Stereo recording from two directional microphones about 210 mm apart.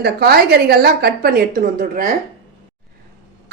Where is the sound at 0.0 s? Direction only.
50° right (ahead or behind).